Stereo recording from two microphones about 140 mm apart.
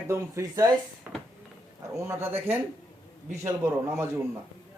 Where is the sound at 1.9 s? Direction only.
20° right (ahead or behind).